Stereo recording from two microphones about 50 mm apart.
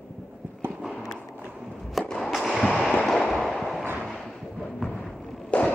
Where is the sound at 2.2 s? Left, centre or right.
Centre.